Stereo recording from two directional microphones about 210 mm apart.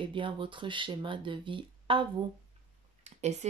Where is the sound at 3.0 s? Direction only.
35° right (ahead or behind).